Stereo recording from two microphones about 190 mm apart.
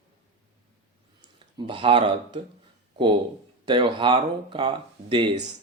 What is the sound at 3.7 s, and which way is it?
Speech, 25° right (ahead or behind).